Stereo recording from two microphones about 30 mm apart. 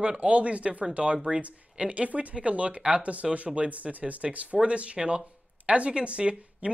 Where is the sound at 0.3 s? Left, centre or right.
Right.